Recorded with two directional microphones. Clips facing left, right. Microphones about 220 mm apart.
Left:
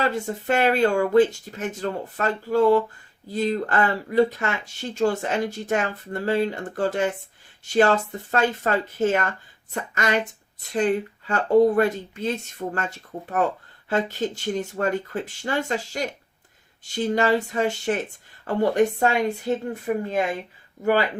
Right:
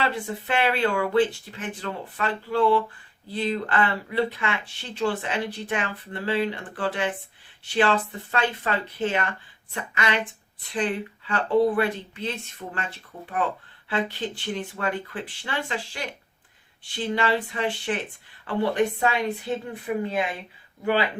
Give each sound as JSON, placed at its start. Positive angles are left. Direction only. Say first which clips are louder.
{"t": 0.0, "sound": "speech", "louder": "left 3 dB", "side_deg": 45}